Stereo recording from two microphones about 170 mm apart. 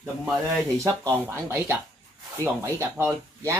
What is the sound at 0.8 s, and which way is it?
Speech, 15° right (ahead or behind).